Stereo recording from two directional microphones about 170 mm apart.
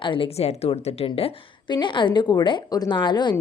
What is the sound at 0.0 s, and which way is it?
Speech, 30° left (ahead or behind).